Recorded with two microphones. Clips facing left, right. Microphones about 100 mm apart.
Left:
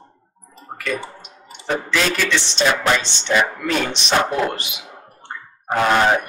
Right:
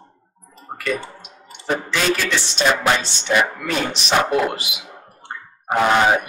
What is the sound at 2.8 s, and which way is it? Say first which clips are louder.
Speech: even; 10° right (ahead or behind).